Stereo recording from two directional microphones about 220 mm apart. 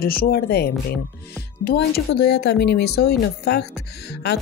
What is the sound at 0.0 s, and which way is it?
A woman's voice, 45° left (ahead or behind).